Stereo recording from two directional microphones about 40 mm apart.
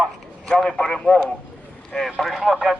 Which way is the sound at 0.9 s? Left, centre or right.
Centre.